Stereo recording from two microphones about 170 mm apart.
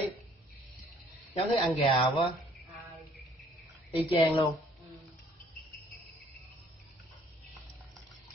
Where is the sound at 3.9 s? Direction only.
25° left (ahead or behind).